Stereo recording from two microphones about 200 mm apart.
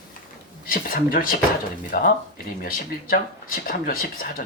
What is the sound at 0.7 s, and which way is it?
Speech, 45° left (ahead or behind).